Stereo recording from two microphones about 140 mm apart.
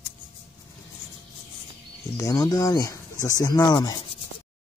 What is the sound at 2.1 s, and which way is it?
Speech, 25° left (ahead or behind).